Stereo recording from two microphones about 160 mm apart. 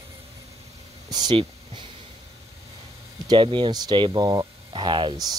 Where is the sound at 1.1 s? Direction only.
30° right (ahead or behind).